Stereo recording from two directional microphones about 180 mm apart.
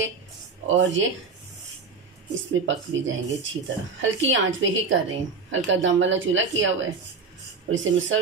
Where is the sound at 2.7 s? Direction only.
90° right.